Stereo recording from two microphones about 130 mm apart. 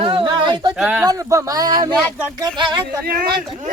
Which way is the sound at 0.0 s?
40° right (ahead or behind).